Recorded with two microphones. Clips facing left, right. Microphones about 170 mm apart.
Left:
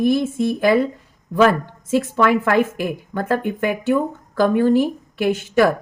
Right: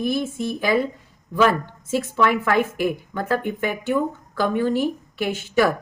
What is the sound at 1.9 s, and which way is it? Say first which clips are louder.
A woman's voice: left 4 dB; 45° left (ahead or behind).